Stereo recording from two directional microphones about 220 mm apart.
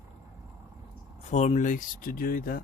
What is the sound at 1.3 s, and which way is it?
A man's voice, 30° left (ahead or behind).